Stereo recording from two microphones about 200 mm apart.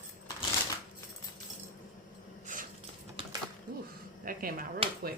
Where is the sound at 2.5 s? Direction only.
40° right (ahead or behind).